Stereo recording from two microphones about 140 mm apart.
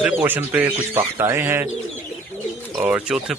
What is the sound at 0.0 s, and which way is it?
Speech, 10° right (ahead or behind).